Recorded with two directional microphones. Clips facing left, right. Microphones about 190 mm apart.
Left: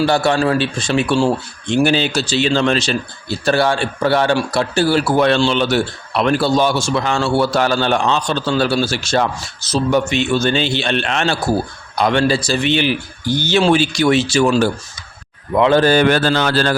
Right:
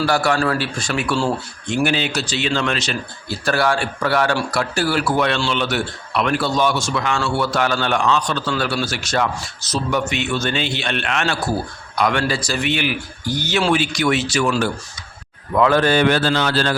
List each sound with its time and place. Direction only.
0.0 s a man's voice: 25° left (ahead or behind); by 16.7 s 45° left (ahead or behind)